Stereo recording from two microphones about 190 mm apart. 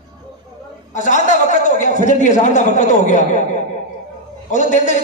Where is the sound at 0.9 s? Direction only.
40° left (ahead or behind).